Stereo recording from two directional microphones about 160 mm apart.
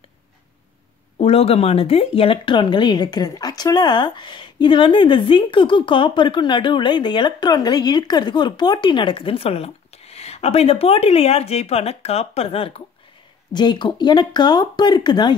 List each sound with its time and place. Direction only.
1.1 s speech: 40° left (ahead or behind)